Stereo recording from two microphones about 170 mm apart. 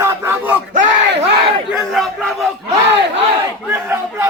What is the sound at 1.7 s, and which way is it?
Speech, centre (ahead or behind).